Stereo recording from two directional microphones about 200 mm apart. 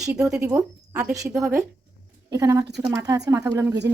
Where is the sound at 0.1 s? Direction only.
5° right (ahead or behind).